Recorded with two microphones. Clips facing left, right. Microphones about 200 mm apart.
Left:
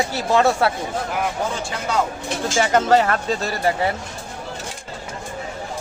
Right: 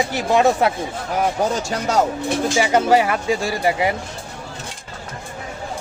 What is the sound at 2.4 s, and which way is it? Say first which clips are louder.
Speech: even; 10° right (ahead or behind).